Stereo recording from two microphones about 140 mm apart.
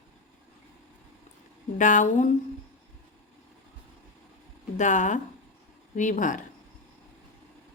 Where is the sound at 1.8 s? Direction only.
65° left (ahead or behind).